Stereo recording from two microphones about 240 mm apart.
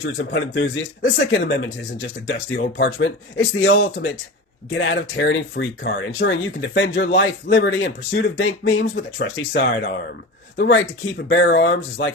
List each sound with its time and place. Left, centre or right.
0.2 s speech: left
11.3 s speech: left